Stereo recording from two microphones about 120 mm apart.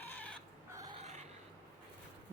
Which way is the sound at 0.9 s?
70° right (ahead or behind).